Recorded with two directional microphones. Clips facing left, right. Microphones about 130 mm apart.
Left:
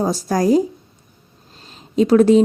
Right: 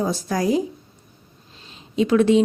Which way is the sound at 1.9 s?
40° left (ahead or behind).